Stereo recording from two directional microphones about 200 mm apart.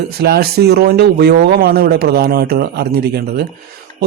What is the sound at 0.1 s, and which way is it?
Speech, 50° right (ahead or behind).